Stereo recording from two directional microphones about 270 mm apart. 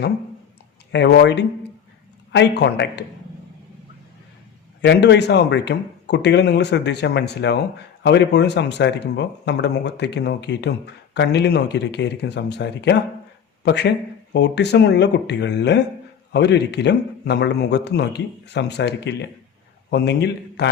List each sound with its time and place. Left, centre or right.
0.9 s speech: left
4.8 s speech: left